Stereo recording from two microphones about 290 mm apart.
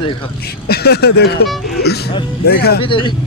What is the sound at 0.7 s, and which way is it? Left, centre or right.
Speech, left.